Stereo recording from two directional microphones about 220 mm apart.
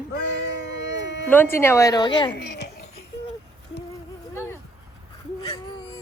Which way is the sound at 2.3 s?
50° left (ahead or behind).